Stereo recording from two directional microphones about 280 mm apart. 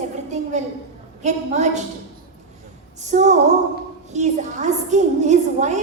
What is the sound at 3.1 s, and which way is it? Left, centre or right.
A woman's voice, right.